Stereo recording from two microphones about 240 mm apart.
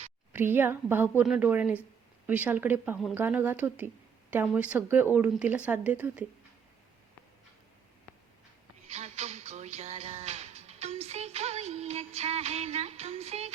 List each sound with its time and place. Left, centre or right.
0.3 s speech: centre
8.9 s music: right